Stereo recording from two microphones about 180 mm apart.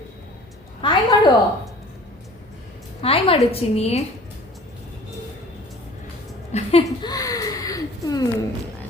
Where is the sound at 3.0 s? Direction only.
30° left (ahead or behind).